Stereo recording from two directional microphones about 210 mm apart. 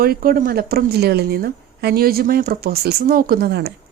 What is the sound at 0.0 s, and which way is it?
A woman's voice, 45° right (ahead or behind).